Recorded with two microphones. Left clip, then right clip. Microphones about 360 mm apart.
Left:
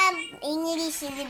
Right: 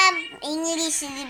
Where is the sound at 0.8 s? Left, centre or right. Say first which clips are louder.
Right 4 dB; right.